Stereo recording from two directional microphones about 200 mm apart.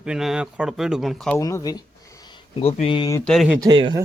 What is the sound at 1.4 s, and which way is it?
Speech, 15° left (ahead or behind).